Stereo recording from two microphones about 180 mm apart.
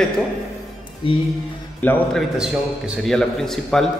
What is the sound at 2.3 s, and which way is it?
Speech, 5° right (ahead or behind).